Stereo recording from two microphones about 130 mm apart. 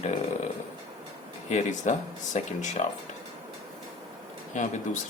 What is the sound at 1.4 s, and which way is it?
Speech, 65° left (ahead or behind).